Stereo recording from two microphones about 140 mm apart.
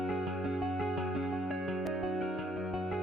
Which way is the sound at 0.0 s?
Centre (ahead or behind).